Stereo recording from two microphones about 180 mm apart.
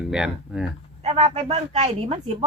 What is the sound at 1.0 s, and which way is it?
A woman's voice, 35° right (ahead or behind).